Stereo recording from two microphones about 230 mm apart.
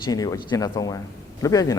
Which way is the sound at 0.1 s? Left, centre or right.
Centre.